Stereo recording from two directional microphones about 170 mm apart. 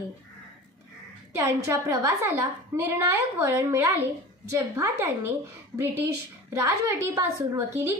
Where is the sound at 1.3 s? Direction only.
15° right (ahead or behind).